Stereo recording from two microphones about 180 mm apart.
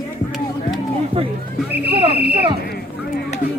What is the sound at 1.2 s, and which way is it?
Speech, 35° right (ahead or behind).